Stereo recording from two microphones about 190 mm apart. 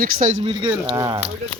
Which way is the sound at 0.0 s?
45° right (ahead or behind).